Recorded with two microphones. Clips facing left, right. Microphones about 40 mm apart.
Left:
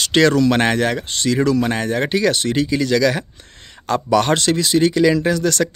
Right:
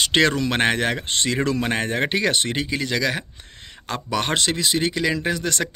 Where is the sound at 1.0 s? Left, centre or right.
Right.